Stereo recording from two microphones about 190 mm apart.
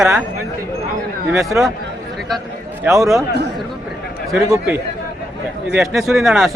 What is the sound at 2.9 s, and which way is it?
Speech, 15° right (ahead or behind).